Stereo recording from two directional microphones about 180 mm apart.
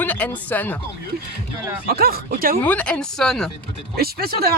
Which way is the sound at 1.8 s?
60° right (ahead or behind).